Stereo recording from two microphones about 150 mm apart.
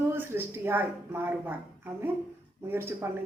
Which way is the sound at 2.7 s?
15° right (ahead or behind).